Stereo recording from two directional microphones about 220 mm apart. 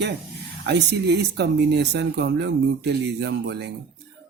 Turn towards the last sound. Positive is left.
turn(degrees=-50)  # may be behind; listen again after turning